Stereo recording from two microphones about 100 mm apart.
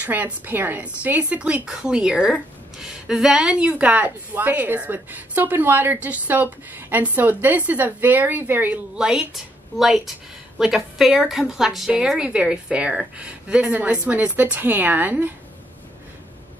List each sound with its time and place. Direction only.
0.0 s a woman's voice: 15° right (ahead or behind)